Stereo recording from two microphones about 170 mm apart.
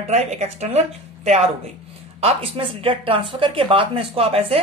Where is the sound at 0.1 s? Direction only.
40° right (ahead or behind).